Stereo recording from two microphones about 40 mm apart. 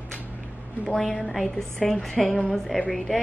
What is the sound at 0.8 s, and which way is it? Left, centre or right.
A woman's voice, centre.